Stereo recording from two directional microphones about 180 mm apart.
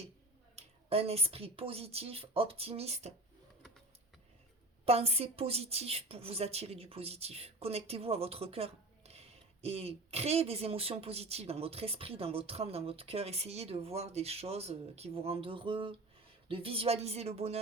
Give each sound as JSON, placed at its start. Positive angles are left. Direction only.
{"t": 0.5, "sound": "a woman's voice", "side_deg": -35}
{"t": 4.9, "sound": "a woman's voice", "side_deg": -35}